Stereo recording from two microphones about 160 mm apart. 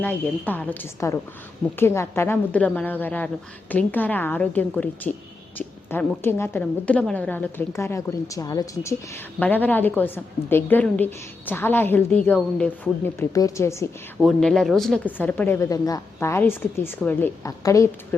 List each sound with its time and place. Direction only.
0.0 s a woman's voice: 10° left (ahead or behind)
14.2 s a woman's voice: centre (ahead or behind); by 17.8 s 20° left (ahead or behind)